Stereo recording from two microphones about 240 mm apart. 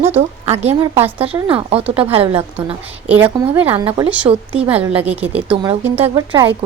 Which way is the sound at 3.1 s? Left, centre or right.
Centre.